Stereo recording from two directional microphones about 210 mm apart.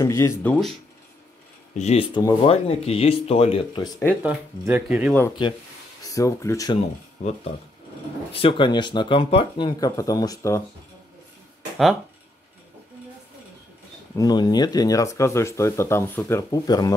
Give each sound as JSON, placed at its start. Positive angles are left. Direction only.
{"t": 0.0, "sound": "speech", "side_deg": 15}
{"t": 1.8, "sound": "speech", "side_deg": 30}
{"t": 4.1, "sound": "speech", "side_deg": -5}
{"t": 6.0, "sound": "speech", "side_deg": 15}
{"t": 8.3, "sound": "speech", "side_deg": 25}
{"t": 14.1, "sound": "speech", "side_deg": 20}